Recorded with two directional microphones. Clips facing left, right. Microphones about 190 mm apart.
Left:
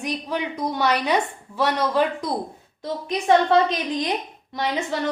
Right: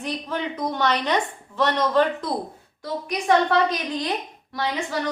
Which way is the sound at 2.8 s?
25° left (ahead or behind).